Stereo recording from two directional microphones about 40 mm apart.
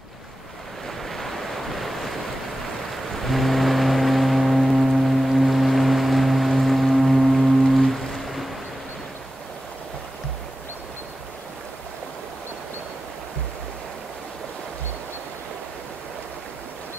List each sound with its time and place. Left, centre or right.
1.0 s waves: centre
2.9 s foghorn: centre